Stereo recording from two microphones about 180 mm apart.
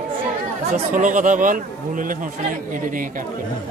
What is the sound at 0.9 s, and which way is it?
A man's voice, 45° right (ahead or behind).